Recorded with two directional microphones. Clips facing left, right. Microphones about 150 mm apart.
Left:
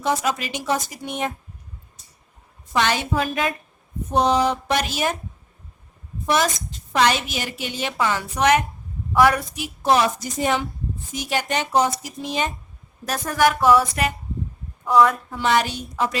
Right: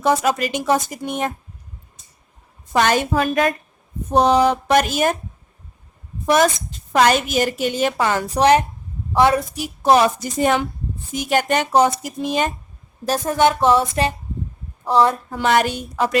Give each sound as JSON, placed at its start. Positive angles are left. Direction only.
{"t": 0.0, "sound": "a woman's voice", "side_deg": -55}
{"t": 2.7, "sound": "a woman's voice", "side_deg": -45}
{"t": 6.2, "sound": "a woman's voice", "side_deg": -50}
{"t": 9.6, "sound": "a woman's voice", "side_deg": -45}
{"t": 13.1, "sound": "a woman's voice", "side_deg": -25}
{"t": 15.4, "sound": "a woman's voice", "side_deg": -50}